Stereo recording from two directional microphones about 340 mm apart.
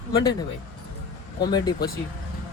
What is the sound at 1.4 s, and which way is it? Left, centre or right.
Speech, centre.